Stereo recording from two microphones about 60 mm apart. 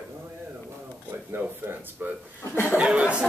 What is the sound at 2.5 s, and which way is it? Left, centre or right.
Speech, left.